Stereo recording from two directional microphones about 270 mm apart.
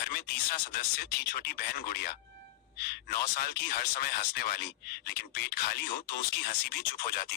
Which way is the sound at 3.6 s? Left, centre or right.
Left.